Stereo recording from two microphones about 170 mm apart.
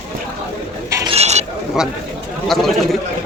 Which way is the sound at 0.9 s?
15° right (ahead or behind).